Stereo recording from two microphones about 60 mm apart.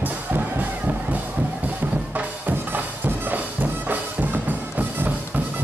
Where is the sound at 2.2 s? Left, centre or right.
Right.